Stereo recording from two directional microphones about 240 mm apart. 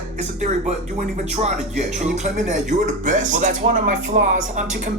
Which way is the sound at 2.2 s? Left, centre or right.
Right.